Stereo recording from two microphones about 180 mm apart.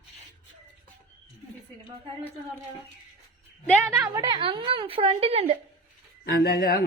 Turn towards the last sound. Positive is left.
turn(degrees=55)  # may be behind; listen again after turning